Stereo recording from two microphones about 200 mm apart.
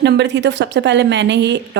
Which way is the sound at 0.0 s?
60° right (ahead or behind).